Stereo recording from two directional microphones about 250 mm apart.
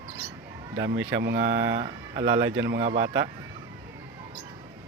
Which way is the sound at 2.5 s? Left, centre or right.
Right.